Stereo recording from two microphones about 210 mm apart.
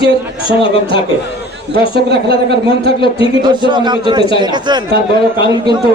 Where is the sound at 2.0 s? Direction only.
50° right (ahead or behind).